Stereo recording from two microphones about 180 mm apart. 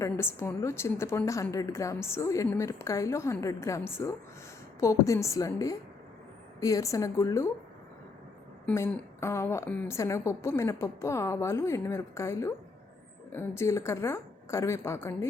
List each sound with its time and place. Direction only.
0.0 s a woman's voice: 15° left (ahead or behind)
8.6 s a woman's voice: 10° left (ahead or behind)